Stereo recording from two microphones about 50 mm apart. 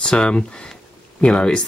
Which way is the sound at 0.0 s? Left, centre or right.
Centre.